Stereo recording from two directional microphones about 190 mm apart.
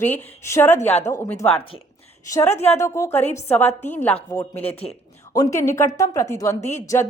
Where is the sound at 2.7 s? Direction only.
15° left (ahead or behind).